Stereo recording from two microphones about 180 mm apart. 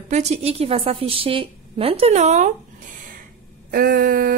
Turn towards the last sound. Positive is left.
turn(degrees=-55)  # may be behind; listen again after turning